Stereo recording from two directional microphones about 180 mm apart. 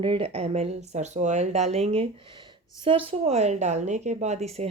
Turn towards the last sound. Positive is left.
turn(degrees=-35)  # may be behind; listen again after turning